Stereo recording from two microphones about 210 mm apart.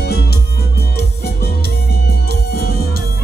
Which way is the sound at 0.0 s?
50° left (ahead or behind).